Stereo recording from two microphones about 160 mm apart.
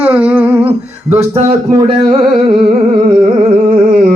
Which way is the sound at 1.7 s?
25° right (ahead or behind).